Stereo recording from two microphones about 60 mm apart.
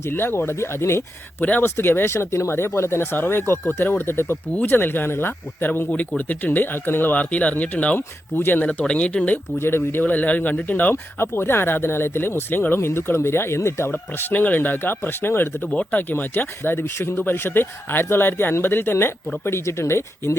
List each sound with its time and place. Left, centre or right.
0.1 s speech: left
1.4 s speech: left
1.6 s speech: left
5.9 s speech: left
7.9 s speech: left
8.8 s speech: centre
9.6 s speech: left
10.0 s speech: left
15.6 s speech: centre; by 20.3 s left